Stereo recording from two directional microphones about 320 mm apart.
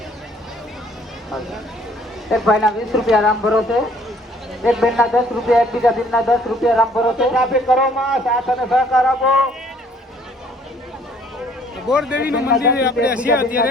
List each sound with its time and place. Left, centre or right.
2.3 s a man's voice: centre
11.9 s a man's voice: centre
12.6 s a man's voice: left
13.1 s a man's voice: centre